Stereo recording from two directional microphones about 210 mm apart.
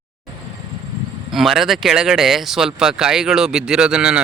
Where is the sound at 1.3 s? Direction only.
Centre (ahead or behind).